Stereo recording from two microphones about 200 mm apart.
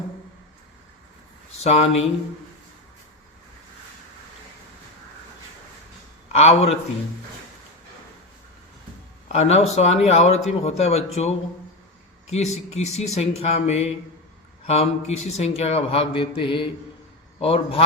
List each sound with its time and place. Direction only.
1.6 s speech: 30° left (ahead or behind)
6.3 s speech: 30° left (ahead or behind)
9.3 s speech: 30° left (ahead or behind)